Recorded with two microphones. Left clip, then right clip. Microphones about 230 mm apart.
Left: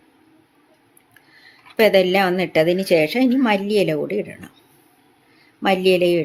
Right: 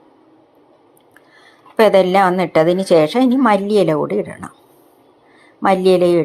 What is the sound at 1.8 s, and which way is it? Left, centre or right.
Speech, centre.